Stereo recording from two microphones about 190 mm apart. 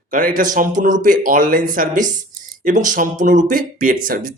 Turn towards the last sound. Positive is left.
turn(degrees=-50)  # may be behind; listen again after turning